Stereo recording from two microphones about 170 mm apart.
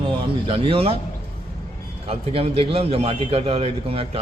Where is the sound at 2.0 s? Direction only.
35° right (ahead or behind).